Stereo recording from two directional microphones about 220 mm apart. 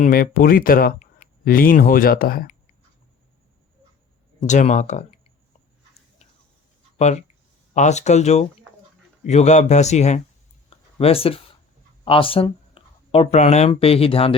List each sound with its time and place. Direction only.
0.0 s speech: 40° left (ahead or behind)
4.4 s speech: 35° left (ahead or behind)
7.0 s speech: 30° left (ahead or behind)